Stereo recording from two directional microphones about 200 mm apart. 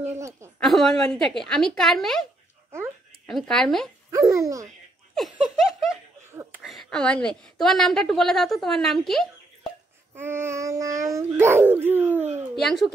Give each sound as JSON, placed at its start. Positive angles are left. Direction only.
{"t": 0.0, "sound": "speech", "side_deg": -15}
{"t": 0.6, "sound": "a woman's voice", "side_deg": 0}
{"t": 3.3, "sound": "a woman's voice", "side_deg": 0}
{"t": 4.1, "sound": "speech", "side_deg": -15}
{"t": 5.1, "sound": "laughter", "side_deg": 0}
{"t": 6.6, "sound": "a woman's voice", "side_deg": 0}
{"t": 10.1, "sound": "speech", "side_deg": -10}
{"t": 12.5, "sound": "a woman's voice", "side_deg": 0}